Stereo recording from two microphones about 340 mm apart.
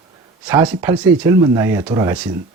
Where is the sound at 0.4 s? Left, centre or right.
Centre.